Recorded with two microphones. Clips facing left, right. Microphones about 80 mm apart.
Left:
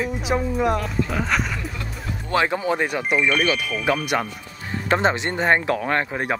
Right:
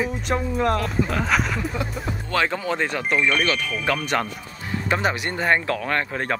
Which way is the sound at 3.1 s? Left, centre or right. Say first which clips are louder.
Left 1 dB; centre.